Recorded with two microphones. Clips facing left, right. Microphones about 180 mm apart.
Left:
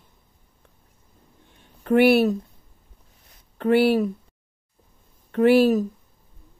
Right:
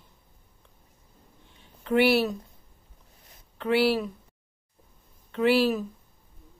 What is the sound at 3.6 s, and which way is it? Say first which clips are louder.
Speech: left 5 dB; 50° left (ahead or behind).